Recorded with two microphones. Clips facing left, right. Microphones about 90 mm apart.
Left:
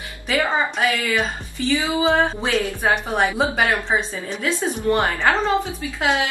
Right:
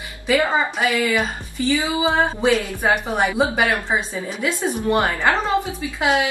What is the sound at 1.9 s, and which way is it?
A woman's voice, 10° right (ahead or behind).